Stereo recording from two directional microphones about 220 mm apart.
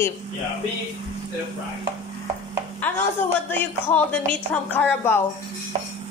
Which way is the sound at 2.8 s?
10° left (ahead or behind).